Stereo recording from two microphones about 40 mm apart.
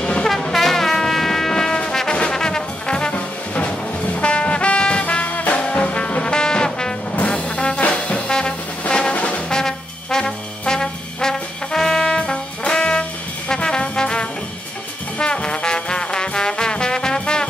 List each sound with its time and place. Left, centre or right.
0.2 s music: centre; by 5.0 s left
5.0 s music: left
5.7 s trombone: left
7.2 s trombone: left
8.8 s music: left
9.1 s brass instrument: left
9.5 s trombone: centre